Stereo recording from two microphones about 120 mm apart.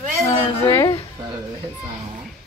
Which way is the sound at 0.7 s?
30° left (ahead or behind).